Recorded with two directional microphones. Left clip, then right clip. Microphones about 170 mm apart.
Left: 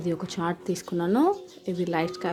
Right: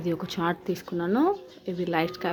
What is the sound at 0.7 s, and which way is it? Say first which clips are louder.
A woman's voice: left 1 dB; 20° left (ahead or behind).